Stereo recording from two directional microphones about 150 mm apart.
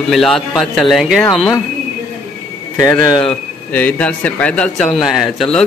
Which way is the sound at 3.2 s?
10° left (ahead or behind).